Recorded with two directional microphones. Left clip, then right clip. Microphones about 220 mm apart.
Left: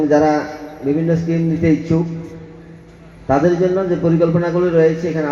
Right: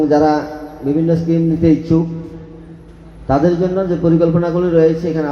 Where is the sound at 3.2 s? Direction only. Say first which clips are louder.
Even; 40° left (ahead or behind).